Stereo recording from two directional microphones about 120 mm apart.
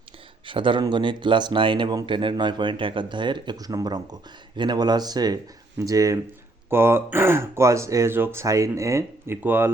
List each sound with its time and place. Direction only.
0.4 s speech: 45° right (ahead or behind); by 9.7 s 15° right (ahead or behind)